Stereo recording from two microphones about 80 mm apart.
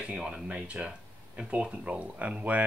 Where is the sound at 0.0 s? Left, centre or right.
Centre.